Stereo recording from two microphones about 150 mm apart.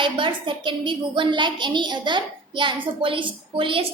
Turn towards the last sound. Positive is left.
turn(degrees=-35)  # may be behind; listen again after turning